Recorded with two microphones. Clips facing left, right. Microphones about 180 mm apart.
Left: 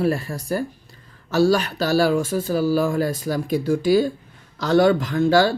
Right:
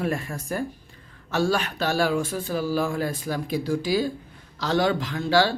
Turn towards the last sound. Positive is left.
turn(degrees=45)  # may be behind; listen again after turning